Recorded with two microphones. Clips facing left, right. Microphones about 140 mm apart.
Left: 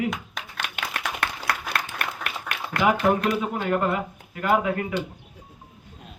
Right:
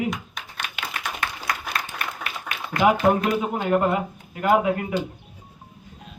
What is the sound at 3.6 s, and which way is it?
A man's voice, 20° right (ahead or behind).